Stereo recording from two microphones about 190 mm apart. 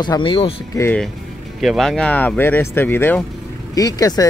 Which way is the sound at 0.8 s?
10° left (ahead or behind).